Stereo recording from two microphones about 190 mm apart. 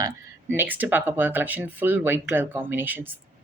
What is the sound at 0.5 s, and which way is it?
Speech, 10° right (ahead or behind).